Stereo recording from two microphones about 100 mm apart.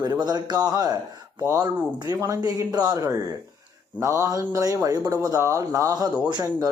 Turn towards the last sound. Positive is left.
turn(degrees=-40)  # may be behind; listen again after turning